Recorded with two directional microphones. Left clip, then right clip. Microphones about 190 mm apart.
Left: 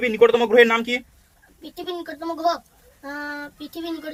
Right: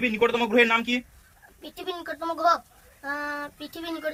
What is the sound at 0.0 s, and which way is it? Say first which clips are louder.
Speech: left 7 dB; 65° left (ahead or behind).